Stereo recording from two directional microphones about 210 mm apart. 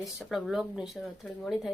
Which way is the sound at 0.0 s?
Centre (ahead or behind).